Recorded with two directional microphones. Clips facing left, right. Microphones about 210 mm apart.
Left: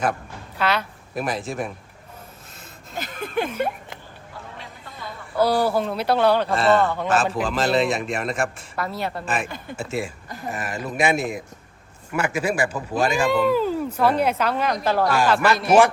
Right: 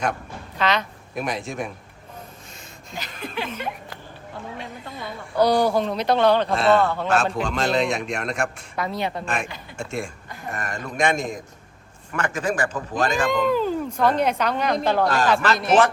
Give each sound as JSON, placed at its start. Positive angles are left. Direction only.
{"t": 0.6, "sound": "speech", "side_deg": 10}
{"t": 2.9, "sound": "speech", "side_deg": 50}
{"t": 5.3, "sound": "a man's voice", "side_deg": 5}